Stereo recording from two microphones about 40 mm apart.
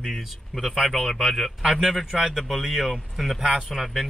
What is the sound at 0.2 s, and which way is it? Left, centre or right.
A man's voice, centre.